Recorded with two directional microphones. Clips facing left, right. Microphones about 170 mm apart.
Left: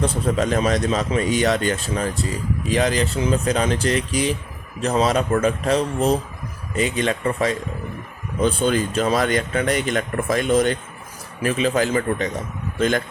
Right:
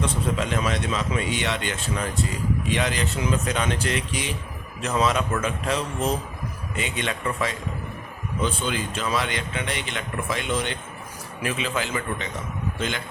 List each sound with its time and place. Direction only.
0.0 s a man's voice: 40° left (ahead or behind)